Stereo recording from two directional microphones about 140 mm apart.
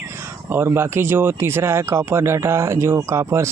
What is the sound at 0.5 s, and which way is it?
Speech, 15° right (ahead or behind).